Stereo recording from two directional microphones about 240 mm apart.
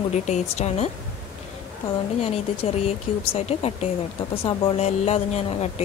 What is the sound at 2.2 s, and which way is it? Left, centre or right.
Speech, left.